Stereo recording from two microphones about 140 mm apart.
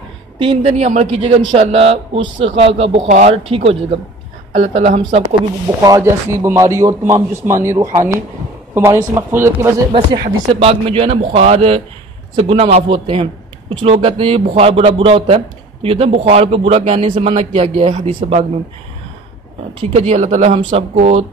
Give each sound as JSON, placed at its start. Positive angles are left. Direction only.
{"t": 0.4, "sound": "a woman's voice", "side_deg": -40}
{"t": 0.7, "sound": "a man's voice", "side_deg": -55}
{"t": 3.1, "sound": "speech", "side_deg": -60}
{"t": 3.4, "sound": "a man's voice", "side_deg": -40}
{"t": 5.8, "sound": "a man's voice", "side_deg": -25}
{"t": 10.1, "sound": "a man's voice", "side_deg": -40}
{"t": 19.9, "sound": "a man's voice", "side_deg": -50}